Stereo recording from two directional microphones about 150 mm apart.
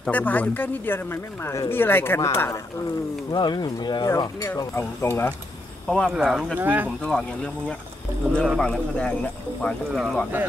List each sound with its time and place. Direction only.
0.0 s speech: 10° left (ahead or behind)
5.9 s speech: centre (ahead or behind)
7.0 s speech: 5° left (ahead or behind)